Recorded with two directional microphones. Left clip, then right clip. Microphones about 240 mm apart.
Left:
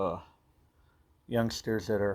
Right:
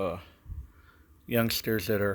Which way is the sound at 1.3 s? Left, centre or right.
Right.